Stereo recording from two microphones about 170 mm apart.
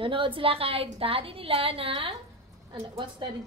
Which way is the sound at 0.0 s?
30° right (ahead or behind).